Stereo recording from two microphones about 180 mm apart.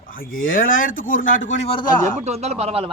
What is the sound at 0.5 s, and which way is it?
Speech, 50° left (ahead or behind).